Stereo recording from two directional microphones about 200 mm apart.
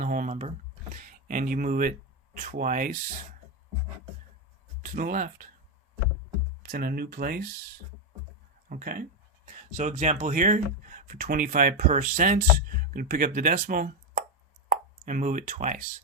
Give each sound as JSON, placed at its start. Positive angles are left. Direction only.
{"t": 0.0, "sound": "speech", "side_deg": -45}
{"t": 4.8, "sound": "speech", "side_deg": -45}
{"t": 6.7, "sound": "speech", "side_deg": -50}